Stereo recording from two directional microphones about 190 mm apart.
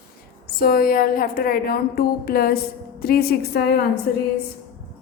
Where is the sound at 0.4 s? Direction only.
55° left (ahead or behind).